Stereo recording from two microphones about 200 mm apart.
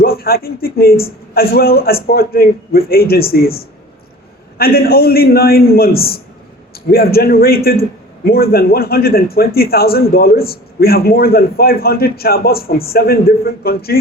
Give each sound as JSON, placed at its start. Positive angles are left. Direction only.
{"t": 0.0, "sound": "a man's voice", "side_deg": 50}
{"t": 4.5, "sound": "a man's voice", "side_deg": 50}